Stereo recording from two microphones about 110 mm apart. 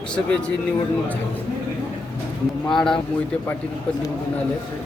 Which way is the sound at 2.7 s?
5° left (ahead or behind).